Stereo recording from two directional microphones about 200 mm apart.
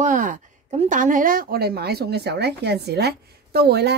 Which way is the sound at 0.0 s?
40° right (ahead or behind).